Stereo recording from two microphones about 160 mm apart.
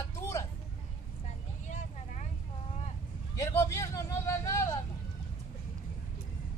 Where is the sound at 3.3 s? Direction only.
20° left (ahead or behind).